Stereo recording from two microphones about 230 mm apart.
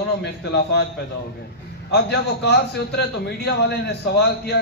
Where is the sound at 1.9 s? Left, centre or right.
Left.